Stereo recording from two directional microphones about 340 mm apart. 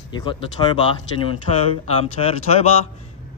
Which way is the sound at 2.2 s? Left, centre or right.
Centre.